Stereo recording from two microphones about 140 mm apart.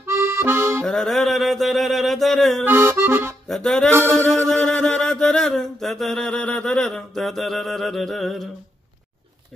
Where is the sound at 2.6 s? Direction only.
15° right (ahead or behind).